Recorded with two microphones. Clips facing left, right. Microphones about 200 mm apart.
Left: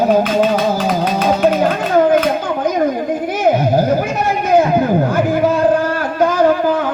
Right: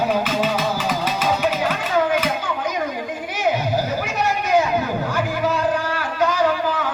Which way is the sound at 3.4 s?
50° left (ahead or behind).